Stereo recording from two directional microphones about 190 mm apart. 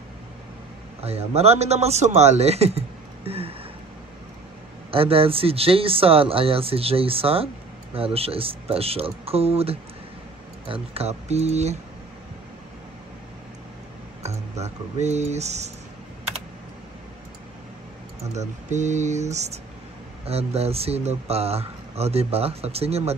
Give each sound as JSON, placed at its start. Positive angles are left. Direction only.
{"t": 1.0, "sound": "speech", "side_deg": -35}
{"t": 3.3, "sound": "a sound", "side_deg": -30}
{"t": 4.9, "sound": "speech", "side_deg": -30}
{"t": 14.6, "sound": "speech", "side_deg": -35}
{"t": 18.7, "sound": "speech", "side_deg": -40}